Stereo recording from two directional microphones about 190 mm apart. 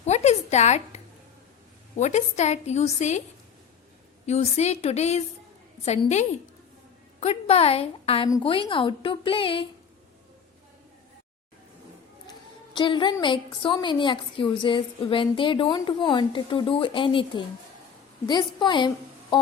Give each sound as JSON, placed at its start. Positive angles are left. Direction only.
{"t": 0.0, "sound": "a sound", "side_deg": 35}
{"t": 2.0, "sound": "a woman's voice", "side_deg": 40}
{"t": 4.3, "sound": "a woman's voice", "side_deg": 35}
{"t": 12.7, "sound": "a woman's voice", "side_deg": 25}